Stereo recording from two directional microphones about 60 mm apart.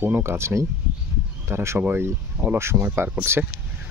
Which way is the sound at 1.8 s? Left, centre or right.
Right.